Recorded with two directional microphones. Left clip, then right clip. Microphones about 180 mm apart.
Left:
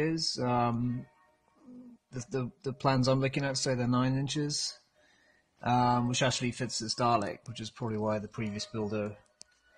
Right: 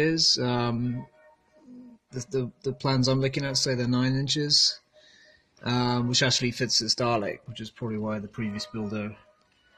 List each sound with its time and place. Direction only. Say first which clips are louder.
0.0 s mantra: right 8 dB; 25° left (ahead or behind)
2.0 s speech: right 6 dB; 45° left (ahead or behind)
5.6 s speech: left 1 dB; 30° left (ahead or behind)